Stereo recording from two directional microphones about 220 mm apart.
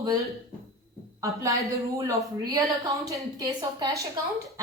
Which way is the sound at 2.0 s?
15° right (ahead or behind).